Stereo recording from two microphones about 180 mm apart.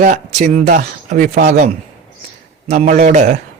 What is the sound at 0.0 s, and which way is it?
A man's voice, 40° right (ahead or behind).